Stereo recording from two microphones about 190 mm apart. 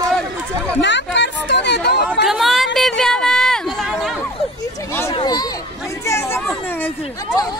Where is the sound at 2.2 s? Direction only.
Centre (ahead or behind).